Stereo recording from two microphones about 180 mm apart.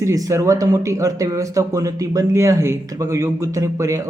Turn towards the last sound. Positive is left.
turn(degrees=-15)  # may be behind; listen again after turning